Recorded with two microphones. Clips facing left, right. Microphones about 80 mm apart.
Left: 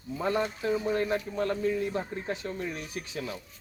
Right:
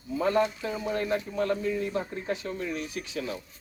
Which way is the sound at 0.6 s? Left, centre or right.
Left.